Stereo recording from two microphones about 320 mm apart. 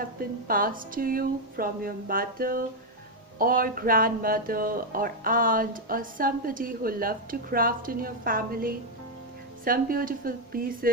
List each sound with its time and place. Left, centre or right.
0.0 s speech: right